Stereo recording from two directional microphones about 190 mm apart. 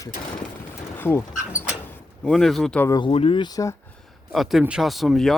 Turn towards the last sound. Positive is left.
turn(degrees=0)  # may be behind; listen again after turning